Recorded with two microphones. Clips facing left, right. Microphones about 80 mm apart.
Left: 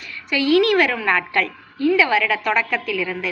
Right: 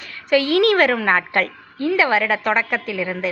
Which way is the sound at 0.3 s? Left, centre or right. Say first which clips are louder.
Right 1 dB; right.